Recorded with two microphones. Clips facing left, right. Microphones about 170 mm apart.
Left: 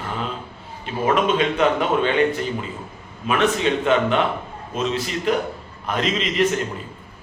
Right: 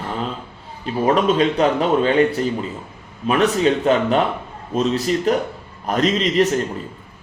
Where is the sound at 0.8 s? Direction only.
35° right (ahead or behind).